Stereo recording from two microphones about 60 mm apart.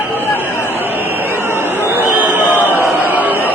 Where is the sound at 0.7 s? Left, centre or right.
Right.